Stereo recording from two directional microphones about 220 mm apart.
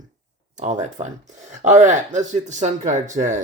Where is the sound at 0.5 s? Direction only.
35° right (ahead or behind).